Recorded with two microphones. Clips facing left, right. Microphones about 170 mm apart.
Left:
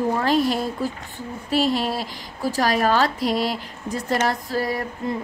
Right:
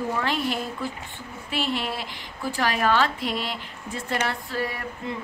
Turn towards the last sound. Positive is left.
turn(degrees=40)  # may be behind; listen again after turning